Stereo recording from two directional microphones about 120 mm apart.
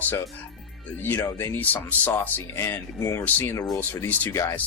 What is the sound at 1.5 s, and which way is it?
Speech, 15° left (ahead or behind).